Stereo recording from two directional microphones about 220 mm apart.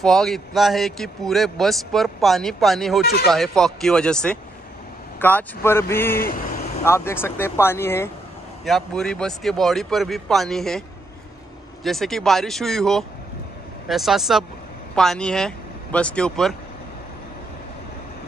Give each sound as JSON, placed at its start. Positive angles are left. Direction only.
{"t": 0.0, "sound": "a man's voice", "side_deg": 0}
{"t": 6.1, "sound": "speech", "side_deg": 45}
{"t": 6.8, "sound": "a man's voice", "side_deg": 10}
{"t": 11.8, "sound": "a man's voice", "side_deg": 0}